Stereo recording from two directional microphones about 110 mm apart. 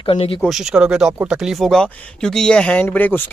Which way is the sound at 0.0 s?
55° left (ahead or behind).